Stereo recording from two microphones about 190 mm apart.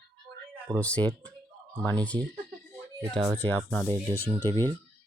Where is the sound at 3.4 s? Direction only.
10° left (ahead or behind).